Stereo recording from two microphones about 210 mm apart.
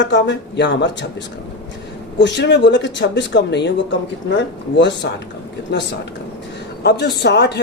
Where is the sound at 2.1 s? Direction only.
55° left (ahead or behind).